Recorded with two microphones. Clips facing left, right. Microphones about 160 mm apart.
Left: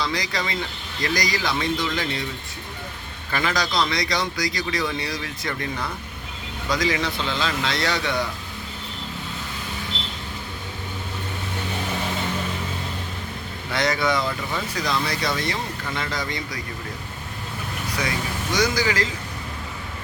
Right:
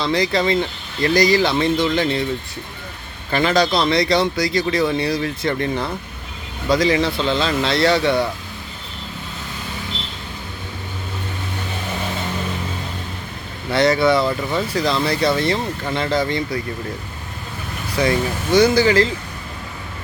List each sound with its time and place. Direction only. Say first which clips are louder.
0.0 s speech: right 8 dB; 25° right (ahead or behind)
3.3 s speech: right 7 dB; 30° right (ahead or behind)
13.7 s speech: right 8 dB; 30° right (ahead or behind)
17.9 s speech: right 10 dB; 30° right (ahead or behind)